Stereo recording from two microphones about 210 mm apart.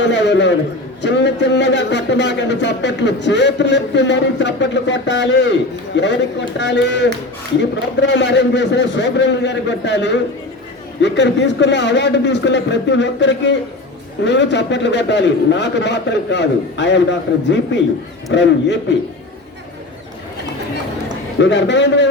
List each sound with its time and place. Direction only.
0.0 s a man's voice: 55° left (ahead or behind)
21.4 s a man's voice: 60° left (ahead or behind)